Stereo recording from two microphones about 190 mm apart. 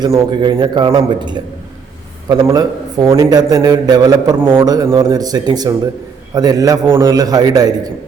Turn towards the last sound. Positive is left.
turn(degrees=-20)  # may be behind; listen again after turning